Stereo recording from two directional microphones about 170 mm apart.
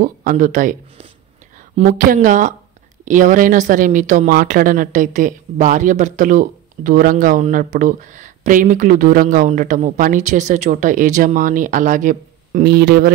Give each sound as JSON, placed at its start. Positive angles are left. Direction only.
{"t": 0.0, "sound": "speech", "side_deg": -55}
{"t": 1.9, "sound": "speech", "side_deg": -50}